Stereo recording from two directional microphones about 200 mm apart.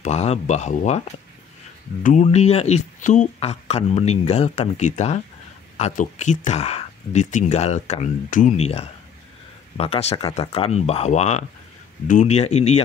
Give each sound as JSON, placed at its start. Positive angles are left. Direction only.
{"t": 0.0, "sound": "speech", "side_deg": 35}
{"t": 2.0, "sound": "speech", "side_deg": 35}